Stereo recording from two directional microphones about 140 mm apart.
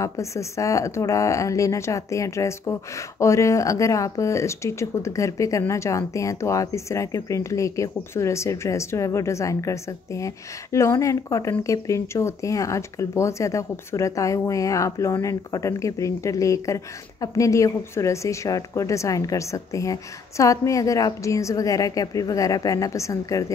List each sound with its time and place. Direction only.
0.0 s speech: 20° left (ahead or behind)